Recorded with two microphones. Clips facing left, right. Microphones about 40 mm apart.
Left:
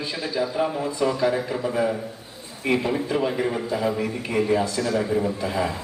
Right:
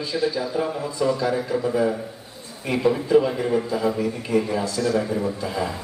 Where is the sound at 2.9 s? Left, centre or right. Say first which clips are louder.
Right 5 dB; centre.